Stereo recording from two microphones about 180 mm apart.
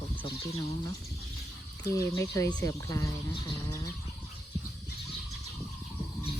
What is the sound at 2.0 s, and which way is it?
Speech, 15° left (ahead or behind).